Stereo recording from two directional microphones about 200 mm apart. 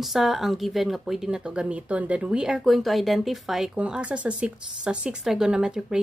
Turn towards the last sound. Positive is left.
turn(degrees=-5)  # may be behind; listen again after turning